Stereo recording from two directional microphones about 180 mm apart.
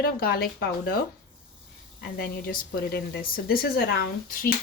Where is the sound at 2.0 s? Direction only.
55° left (ahead or behind).